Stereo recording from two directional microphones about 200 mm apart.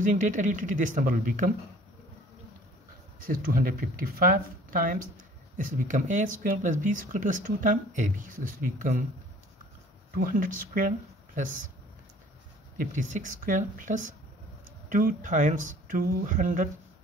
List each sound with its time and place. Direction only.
0.0 s speech: 40° right (ahead or behind)
3.3 s speech: 45° right (ahead or behind)
10.1 s speech: 45° right (ahead or behind)
12.7 s speech: 40° right (ahead or behind)